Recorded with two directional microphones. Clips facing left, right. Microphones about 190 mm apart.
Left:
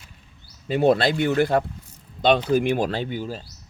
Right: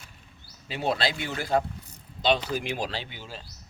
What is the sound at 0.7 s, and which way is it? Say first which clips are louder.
Speech: left 9 dB; 55° left (ahead or behind).